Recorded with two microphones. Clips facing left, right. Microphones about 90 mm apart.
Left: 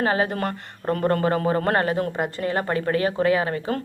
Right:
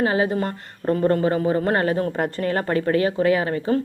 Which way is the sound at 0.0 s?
35° left (ahead or behind).